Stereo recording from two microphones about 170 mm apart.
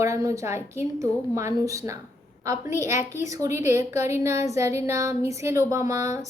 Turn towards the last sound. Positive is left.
turn(degrees=-20)  # may be behind; listen again after turning